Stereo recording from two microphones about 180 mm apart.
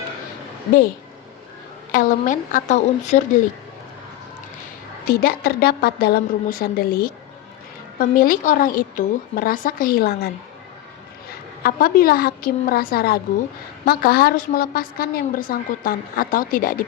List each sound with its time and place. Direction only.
1.9 s a woman's voice: 45° left (ahead or behind)
5.0 s a woman's voice: 55° left (ahead or behind)
11.6 s a woman's voice: 55° left (ahead or behind)